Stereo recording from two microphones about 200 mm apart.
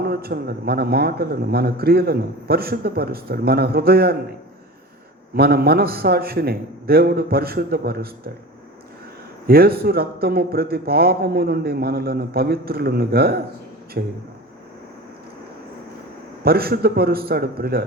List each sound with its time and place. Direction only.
0.0 s a man's voice: 50° right (ahead or behind)
5.3 s a man's voice: 50° right (ahead or behind)
9.5 s a man's voice: 50° right (ahead or behind)
16.4 s a man's voice: 50° right (ahead or behind)